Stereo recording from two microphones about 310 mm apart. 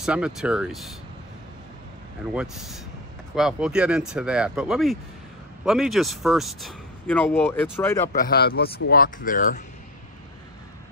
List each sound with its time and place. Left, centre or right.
0.0 s speech: centre
2.3 s speech: centre
8.1 s speech: left